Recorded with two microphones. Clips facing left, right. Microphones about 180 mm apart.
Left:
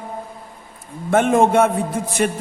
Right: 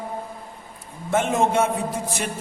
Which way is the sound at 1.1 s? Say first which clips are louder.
Left 6 dB; 55° left (ahead or behind).